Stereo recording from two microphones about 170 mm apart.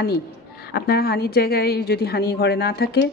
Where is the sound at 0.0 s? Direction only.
65° left (ahead or behind).